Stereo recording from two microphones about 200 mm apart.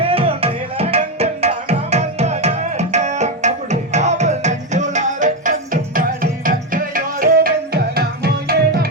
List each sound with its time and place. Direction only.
0.0 s music: 30° right (ahead or behind); by 8.9 s 50° right (ahead or behind)